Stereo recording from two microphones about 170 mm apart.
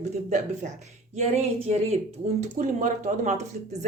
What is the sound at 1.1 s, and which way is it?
Speech, 35° right (ahead or behind).